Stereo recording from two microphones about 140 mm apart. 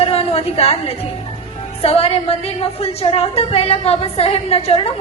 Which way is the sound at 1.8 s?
45° left (ahead or behind).